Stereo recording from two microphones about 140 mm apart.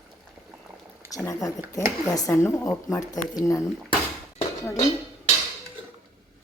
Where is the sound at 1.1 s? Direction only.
25° left (ahead or behind).